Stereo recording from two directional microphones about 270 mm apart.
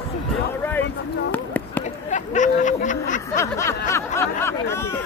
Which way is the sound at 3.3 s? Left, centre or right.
Centre.